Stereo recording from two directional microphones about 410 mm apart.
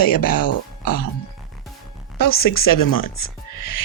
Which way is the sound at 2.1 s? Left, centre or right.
Left.